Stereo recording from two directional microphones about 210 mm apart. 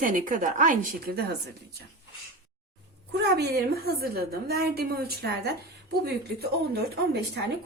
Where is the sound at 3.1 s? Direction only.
50° right (ahead or behind).